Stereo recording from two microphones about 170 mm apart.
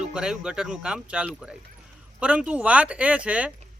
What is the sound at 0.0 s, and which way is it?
Speech, 5° right (ahead or behind).